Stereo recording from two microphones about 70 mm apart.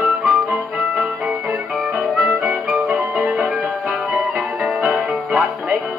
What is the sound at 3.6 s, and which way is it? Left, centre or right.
Music, centre.